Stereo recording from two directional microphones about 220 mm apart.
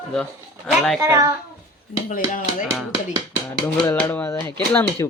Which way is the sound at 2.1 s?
35° left (ahead or behind).